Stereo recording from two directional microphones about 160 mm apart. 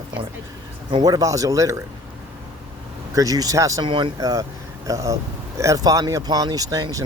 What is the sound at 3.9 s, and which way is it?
Speech, 30° right (ahead or behind).